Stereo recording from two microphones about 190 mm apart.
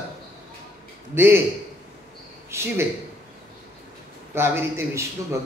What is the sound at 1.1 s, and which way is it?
Speech, 15° right (ahead or behind).